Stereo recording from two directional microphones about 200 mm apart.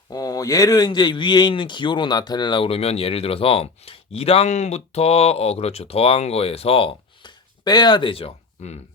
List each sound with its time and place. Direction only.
0.1 s a man's voice: 20° left (ahead or behind)